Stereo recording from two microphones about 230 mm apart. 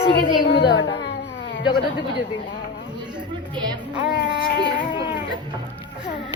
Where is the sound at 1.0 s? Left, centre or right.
Left.